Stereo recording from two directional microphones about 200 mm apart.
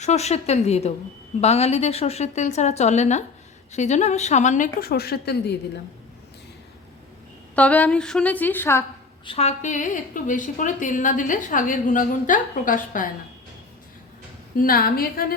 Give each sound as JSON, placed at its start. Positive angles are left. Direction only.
{"t": 0.0, "sound": "a woman's voice", "side_deg": 35}
{"t": 7.5, "sound": "a woman's voice", "side_deg": 5}
{"t": 9.2, "sound": "a woman's voice", "side_deg": 30}
{"t": 14.6, "sound": "a woman's voice", "side_deg": 45}